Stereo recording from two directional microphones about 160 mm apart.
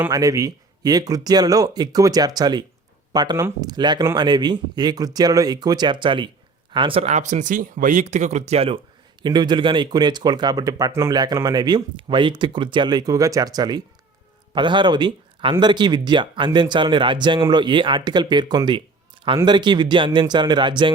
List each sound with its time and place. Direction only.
0.1 s speech: 20° right (ahead or behind); by 8.8 s 40° right (ahead or behind)
9.2 s a man's voice: 30° right (ahead or behind)